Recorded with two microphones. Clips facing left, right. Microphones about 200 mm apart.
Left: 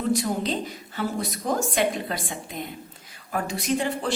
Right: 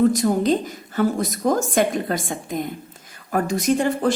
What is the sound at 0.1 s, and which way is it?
A woman's voice, 45° right (ahead or behind).